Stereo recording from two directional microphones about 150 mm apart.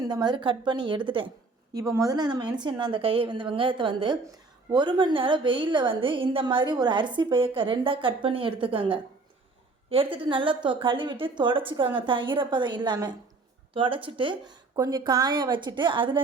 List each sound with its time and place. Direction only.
0.0 s a woman's voice: 25° right (ahead or behind)
1.7 s a woman's voice: 20° right (ahead or behind)